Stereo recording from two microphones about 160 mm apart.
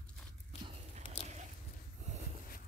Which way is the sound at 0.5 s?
40° left (ahead or behind).